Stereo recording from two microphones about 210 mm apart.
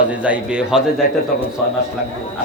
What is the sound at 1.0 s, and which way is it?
Speech, 45° left (ahead or behind).